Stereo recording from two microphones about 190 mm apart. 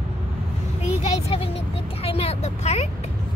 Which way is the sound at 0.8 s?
35° left (ahead or behind).